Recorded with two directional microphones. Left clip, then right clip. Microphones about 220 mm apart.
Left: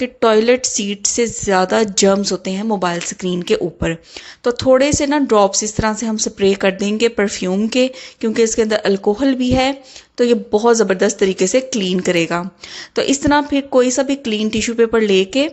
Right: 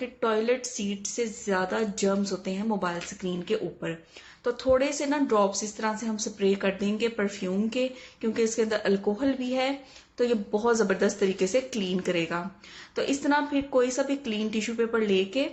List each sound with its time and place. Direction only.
0.0 s a woman's voice: 45° left (ahead or behind)